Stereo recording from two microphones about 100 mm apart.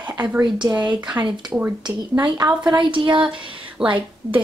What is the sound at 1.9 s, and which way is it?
Speech, 45° right (ahead or behind).